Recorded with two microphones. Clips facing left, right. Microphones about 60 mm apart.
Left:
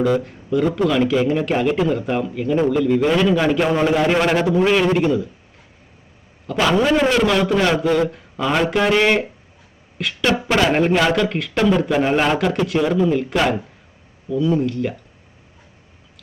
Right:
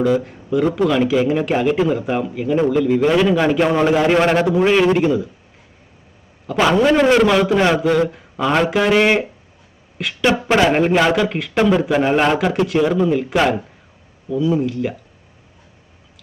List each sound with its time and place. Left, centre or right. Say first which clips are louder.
0.0 s speech: right 1 dB; centre
6.6 s a man's voice: right 2 dB; centre
10.2 s a man's voice: right 3 dB; centre
10.7 s speech: right 2 dB; centre